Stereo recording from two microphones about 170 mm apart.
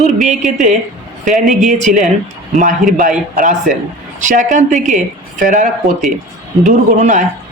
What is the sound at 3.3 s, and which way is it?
Speech, 50° right (ahead or behind).